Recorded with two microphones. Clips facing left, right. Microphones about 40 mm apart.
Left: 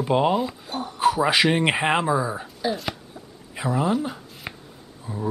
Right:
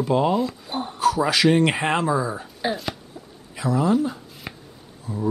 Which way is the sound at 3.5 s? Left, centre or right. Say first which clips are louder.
Right 2 dB; left.